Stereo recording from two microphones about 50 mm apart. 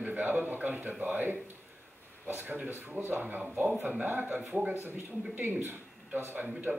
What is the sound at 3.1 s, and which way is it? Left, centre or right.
A man's voice, right.